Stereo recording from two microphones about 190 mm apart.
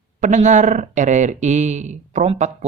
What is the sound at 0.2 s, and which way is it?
Speech, 40° right (ahead or behind).